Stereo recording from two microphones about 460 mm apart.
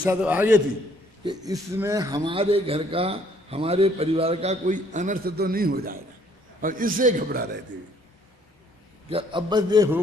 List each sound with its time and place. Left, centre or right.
0.0 s a man's voice: centre
9.1 s a man's voice: centre